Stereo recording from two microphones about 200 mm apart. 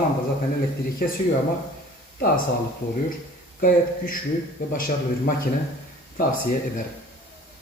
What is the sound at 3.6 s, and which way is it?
Speech, 45° left (ahead or behind).